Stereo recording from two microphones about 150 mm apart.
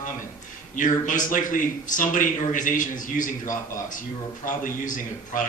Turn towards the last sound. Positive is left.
turn(degrees=60)  # may be behind; listen again after turning